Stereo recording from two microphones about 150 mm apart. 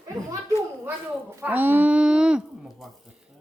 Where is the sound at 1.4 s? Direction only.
10° right (ahead or behind).